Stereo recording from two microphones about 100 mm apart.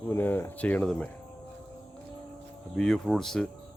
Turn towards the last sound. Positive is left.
turn(degrees=5)  # may be behind; listen again after turning